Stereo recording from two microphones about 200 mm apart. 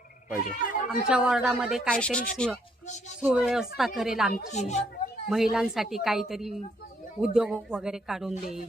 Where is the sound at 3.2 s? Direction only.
5° right (ahead or behind).